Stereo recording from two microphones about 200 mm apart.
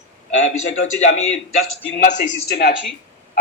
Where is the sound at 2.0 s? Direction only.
40° left (ahead or behind).